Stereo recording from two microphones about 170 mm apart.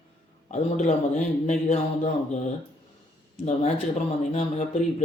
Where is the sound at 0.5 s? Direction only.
45° left (ahead or behind).